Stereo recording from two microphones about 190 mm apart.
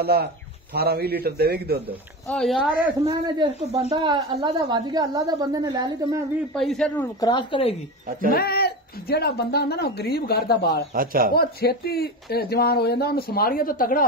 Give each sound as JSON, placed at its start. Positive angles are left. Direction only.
{"t": 0.0, "sound": "a man's voice", "side_deg": -55}
{"t": 2.2, "sound": "a man's voice", "side_deg": 5}
{"t": 3.5, "sound": "speech", "side_deg": -35}
{"t": 3.9, "sound": "a woman's voice", "side_deg": -20}
{"t": 6.5, "sound": "a man's voice", "side_deg": 0}
{"t": 7.2, "sound": "speech", "side_deg": 25}
{"t": 8.3, "sound": "speech", "side_deg": 55}
{"t": 11.0, "sound": "speech", "side_deg": -50}
{"t": 11.3, "sound": "speech", "side_deg": 55}